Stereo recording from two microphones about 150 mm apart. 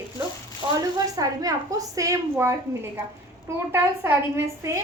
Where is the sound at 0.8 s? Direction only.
25° right (ahead or behind).